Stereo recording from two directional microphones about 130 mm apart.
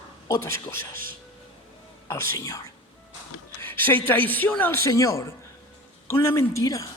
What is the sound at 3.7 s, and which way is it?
A man's voice, 15° left (ahead or behind).